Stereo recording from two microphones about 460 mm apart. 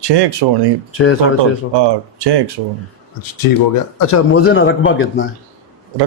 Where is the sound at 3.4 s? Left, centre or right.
Left.